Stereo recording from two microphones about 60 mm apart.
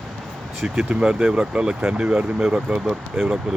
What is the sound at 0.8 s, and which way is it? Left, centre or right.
Speech, centre.